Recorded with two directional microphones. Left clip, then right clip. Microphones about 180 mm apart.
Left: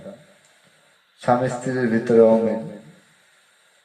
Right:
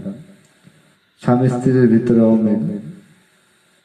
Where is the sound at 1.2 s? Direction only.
25° right (ahead or behind).